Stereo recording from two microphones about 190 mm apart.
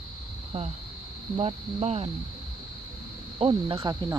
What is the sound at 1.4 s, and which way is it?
Speech, 30° right (ahead or behind).